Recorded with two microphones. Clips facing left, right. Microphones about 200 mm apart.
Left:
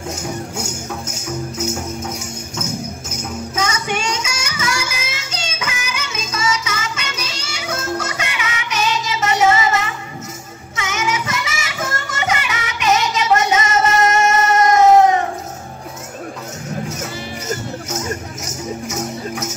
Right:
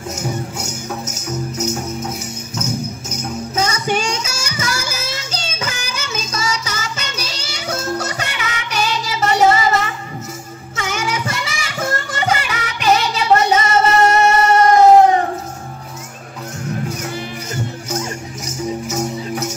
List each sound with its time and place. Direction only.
3.5 s music: 35° right (ahead or behind)
17.8 s music: centre (ahead or behind)